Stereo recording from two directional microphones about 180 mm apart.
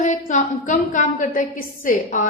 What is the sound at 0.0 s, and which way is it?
A woman's voice, 45° left (ahead or behind).